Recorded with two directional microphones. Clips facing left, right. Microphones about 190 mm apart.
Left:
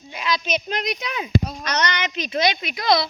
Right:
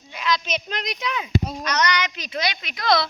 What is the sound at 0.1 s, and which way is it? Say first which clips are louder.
A child's voice: left 1 dB; 15° left (ahead or behind).